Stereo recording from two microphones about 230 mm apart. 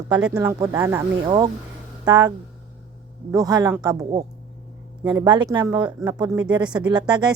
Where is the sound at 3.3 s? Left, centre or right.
Centre.